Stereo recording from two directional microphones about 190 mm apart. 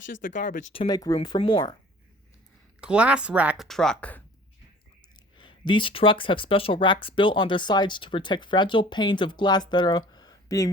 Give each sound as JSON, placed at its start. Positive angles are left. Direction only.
{"t": 0.2, "sound": "speech", "side_deg": 45}
{"t": 0.7, "sound": "speech", "side_deg": 25}
{"t": 2.8, "sound": "speech", "side_deg": -5}
{"t": 5.4, "sound": "speech", "side_deg": 25}